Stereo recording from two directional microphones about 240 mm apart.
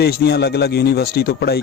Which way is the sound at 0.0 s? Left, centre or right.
Left.